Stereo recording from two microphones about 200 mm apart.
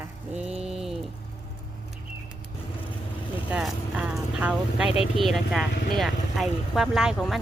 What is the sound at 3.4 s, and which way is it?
Speech, 5° right (ahead or behind).